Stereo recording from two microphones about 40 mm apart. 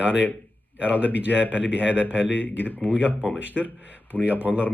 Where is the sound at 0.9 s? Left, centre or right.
Left.